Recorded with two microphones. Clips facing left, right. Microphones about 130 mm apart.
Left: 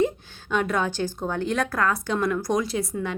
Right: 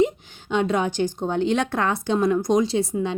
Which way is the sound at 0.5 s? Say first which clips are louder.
Right 3 dB; 25° right (ahead or behind).